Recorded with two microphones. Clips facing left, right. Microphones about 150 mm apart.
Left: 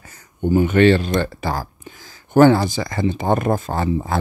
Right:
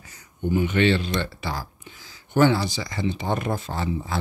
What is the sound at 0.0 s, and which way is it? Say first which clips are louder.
Speech: left 6 dB; 50° left (ahead or behind).